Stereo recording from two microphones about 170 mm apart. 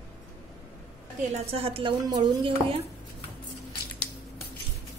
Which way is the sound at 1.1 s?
40° right (ahead or behind).